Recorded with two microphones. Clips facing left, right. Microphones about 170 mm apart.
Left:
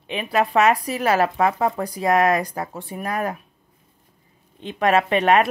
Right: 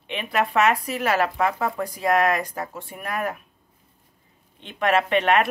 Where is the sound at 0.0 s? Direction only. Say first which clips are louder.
Left 3 dB; 35° left (ahead or behind).